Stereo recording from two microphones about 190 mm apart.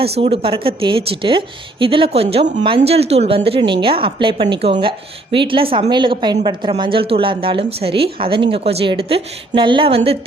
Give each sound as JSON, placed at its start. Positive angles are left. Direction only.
{"t": 0.0, "sound": "a woman's voice", "side_deg": -30}